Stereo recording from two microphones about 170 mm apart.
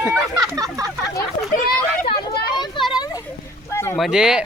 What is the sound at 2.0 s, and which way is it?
Children playing, 25° left (ahead or behind).